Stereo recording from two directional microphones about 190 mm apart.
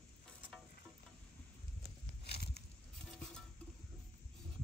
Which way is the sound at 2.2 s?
60° left (ahead or behind).